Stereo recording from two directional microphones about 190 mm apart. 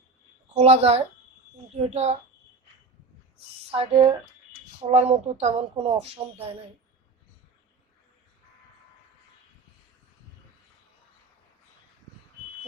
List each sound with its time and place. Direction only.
0.5 s speech: 35° right (ahead or behind)
3.7 s speech: 30° right (ahead or behind)